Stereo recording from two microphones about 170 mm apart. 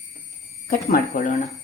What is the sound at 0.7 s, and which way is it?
Speech, 55° left (ahead or behind).